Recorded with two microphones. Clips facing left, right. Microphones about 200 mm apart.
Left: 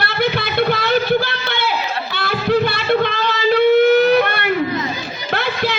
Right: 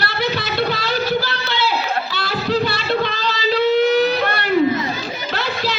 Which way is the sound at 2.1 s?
55° left (ahead or behind).